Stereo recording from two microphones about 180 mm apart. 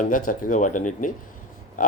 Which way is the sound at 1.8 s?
50° left (ahead or behind).